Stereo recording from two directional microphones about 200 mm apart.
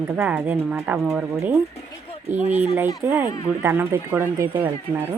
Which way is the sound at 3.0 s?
10° right (ahead or behind).